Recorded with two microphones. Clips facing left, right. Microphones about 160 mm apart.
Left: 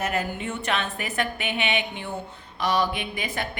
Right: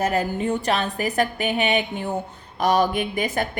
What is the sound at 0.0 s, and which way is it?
A woman's voice, 35° right (ahead or behind).